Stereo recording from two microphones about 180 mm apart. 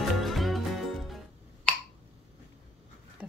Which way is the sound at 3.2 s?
10° right (ahead or behind).